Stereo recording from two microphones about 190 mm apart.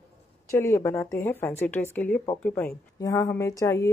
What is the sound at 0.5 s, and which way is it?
Speech, 15° left (ahead or behind).